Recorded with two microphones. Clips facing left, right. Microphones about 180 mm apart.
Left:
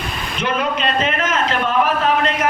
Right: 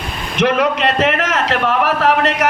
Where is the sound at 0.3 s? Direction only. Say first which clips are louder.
Right 6 dB; 75° right (ahead or behind).